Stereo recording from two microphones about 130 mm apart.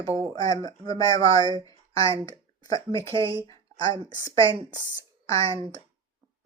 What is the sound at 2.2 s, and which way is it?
Speech, 30° left (ahead or behind).